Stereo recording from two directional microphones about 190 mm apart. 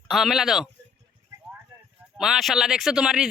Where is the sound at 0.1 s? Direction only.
Centre (ahead or behind).